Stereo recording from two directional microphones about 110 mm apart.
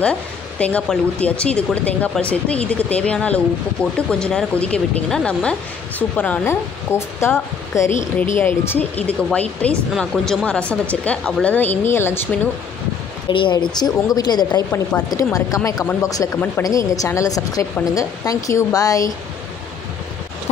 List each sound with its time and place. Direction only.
0.0 s speech: 10° left (ahead or behind)
13.3 s a woman's voice: 45° left (ahead or behind)